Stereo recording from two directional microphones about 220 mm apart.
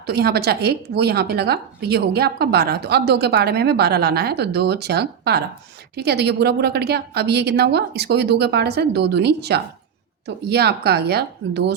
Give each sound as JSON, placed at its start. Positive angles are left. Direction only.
{"t": 0.0, "sound": "a woman's voice", "side_deg": -45}